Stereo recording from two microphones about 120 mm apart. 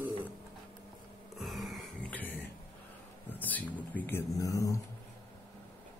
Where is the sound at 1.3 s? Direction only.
Centre (ahead or behind).